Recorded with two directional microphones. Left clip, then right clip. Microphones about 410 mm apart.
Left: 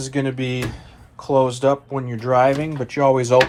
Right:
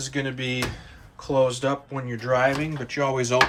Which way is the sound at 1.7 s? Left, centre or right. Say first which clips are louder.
Left 7 dB; centre.